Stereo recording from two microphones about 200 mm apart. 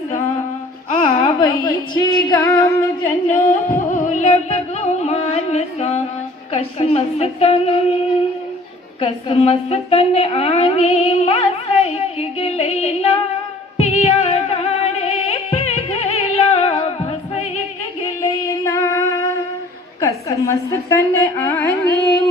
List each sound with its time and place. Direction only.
0.9 s a sound: 30° left (ahead or behind)
1.6 s singing: 20° left (ahead or behind)
3.3 s music: 40° left (ahead or behind)
6.5 s speech: 35° left (ahead or behind)
13.7 s music: 35° left (ahead or behind)
18.6 s music: 15° left (ahead or behind)
20.0 s a woman's voice: 15° left (ahead or behind)